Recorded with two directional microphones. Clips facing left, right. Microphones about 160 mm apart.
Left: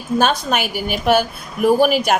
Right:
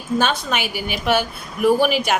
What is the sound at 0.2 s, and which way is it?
Speech, 45° left (ahead or behind).